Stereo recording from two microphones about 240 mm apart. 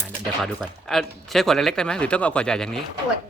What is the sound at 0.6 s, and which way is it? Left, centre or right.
Speech, centre.